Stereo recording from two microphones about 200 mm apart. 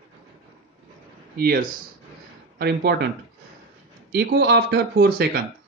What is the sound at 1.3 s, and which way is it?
Speech, 45° right (ahead or behind).